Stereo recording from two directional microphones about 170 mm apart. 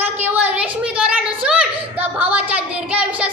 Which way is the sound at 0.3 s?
10° right (ahead or behind).